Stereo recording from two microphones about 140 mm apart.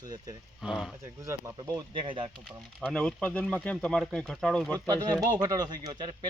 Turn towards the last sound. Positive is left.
turn(degrees=-30)  # may be behind; listen again after turning